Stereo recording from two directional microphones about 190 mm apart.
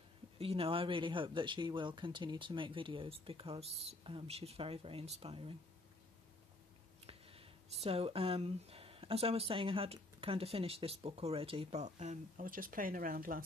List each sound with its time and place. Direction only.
0.4 s speech: 30° right (ahead or behind)
7.1 s speech: 30° right (ahead or behind); by 13.4 s 45° right (ahead or behind)